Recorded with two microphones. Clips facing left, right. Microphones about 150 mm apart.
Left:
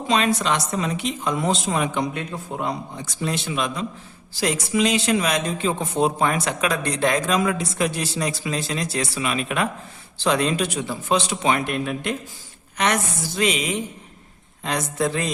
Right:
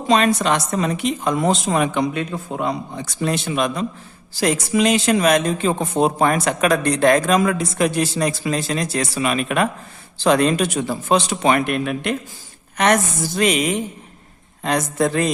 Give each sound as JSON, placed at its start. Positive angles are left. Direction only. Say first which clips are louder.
{"t": 0.4, "sound": "speech", "louder": "right 4 dB", "side_deg": -50}
{"t": 3.2, "sound": "speech", "louder": "right 5 dB", "side_deg": -50}
{"t": 12.7, "sound": "speech", "louder": "right 5 dB", "side_deg": -50}